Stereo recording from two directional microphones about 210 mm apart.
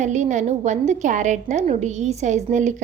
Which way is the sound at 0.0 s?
35° right (ahead or behind).